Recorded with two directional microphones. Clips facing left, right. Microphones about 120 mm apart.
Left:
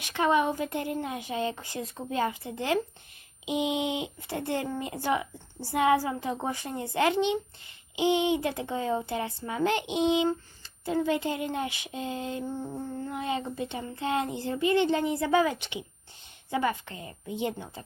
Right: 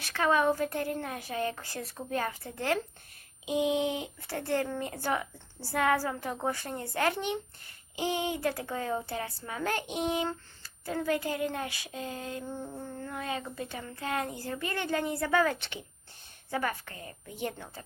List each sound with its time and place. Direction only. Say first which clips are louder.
0.0 s speech: left 2 dB; 20° left (ahead or behind)
16.9 s speech: left 7 dB; 20° left (ahead or behind)